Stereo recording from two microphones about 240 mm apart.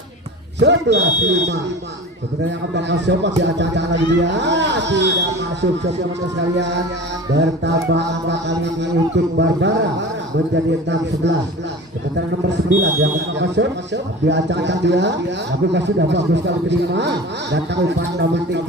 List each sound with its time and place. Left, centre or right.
0.6 s speech: right
2.7 s speech: right
7.3 s speech: right